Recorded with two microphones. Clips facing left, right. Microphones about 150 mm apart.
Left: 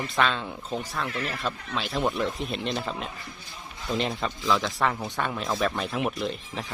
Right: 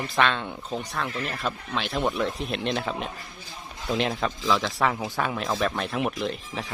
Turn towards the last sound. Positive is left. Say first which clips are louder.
# right 1 dB
turn(degrees=0)  # may be behind; listen again after turning